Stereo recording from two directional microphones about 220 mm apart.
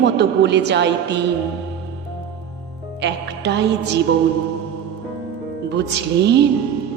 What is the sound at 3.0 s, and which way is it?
Music, 50° right (ahead or behind).